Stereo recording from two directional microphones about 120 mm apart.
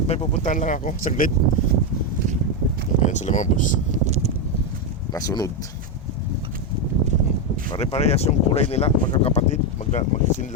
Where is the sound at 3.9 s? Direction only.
65° right (ahead or behind).